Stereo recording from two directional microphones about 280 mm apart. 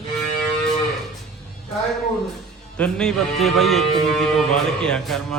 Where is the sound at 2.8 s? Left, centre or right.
Centre.